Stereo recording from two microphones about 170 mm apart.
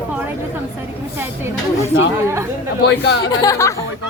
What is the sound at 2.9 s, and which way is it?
Speech, 80° left.